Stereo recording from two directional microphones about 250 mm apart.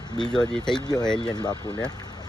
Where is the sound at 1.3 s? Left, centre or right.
Centre.